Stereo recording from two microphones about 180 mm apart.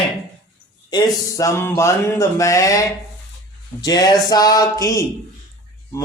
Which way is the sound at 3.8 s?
20° left (ahead or behind).